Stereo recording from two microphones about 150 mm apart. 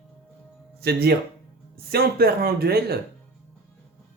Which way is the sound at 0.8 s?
90° right.